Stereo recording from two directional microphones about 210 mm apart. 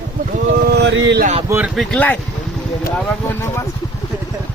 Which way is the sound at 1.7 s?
5° left (ahead or behind).